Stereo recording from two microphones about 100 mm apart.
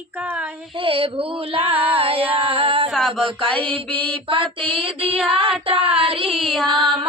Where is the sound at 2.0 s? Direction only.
70° right (ahead or behind).